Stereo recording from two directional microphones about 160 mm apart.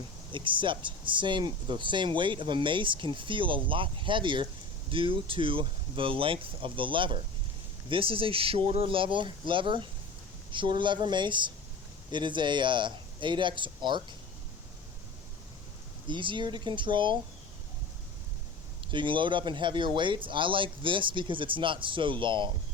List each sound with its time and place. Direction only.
0.3 s speech: 30° right (ahead or behind)
16.0 s speech: 30° right (ahead or behind)
18.9 s speech: 30° right (ahead or behind)